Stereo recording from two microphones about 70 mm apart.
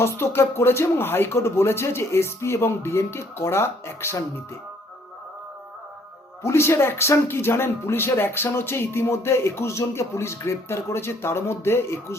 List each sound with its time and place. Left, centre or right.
0.0 s speech: left
6.4 s speech: left